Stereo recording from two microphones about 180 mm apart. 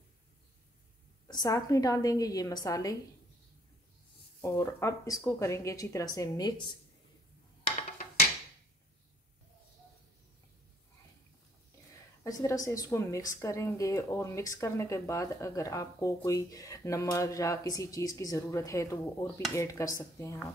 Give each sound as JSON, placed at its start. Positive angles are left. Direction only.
{"t": 1.2, "sound": "a woman's voice", "side_deg": 20}
{"t": 4.4, "sound": "speech", "side_deg": 15}
{"t": 12.2, "sound": "speech", "side_deg": 20}